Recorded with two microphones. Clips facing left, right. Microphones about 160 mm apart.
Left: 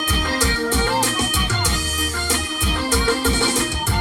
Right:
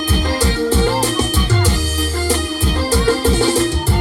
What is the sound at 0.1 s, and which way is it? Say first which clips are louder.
Music: right 4 dB; 35° right (ahead or behind).